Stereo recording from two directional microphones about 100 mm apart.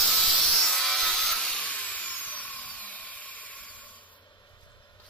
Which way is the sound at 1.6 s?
15° left (ahead or behind).